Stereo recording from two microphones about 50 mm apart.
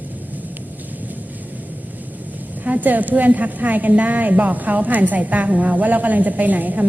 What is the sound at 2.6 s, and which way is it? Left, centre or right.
A woman's voice, right.